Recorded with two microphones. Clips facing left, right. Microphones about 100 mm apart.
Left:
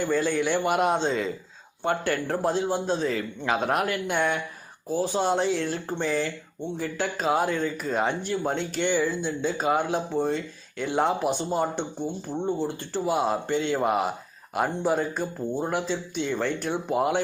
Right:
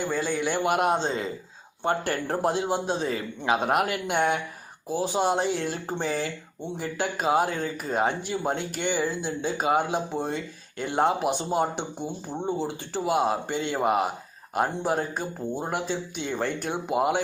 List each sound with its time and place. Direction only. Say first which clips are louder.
0.0 s speech: left 3 dB; 5° right (ahead or behind)
0.9 s speech: left 2 dB; 40° right (ahead or behind)
2.6 s speech: left 1 dB; 15° right (ahead or behind)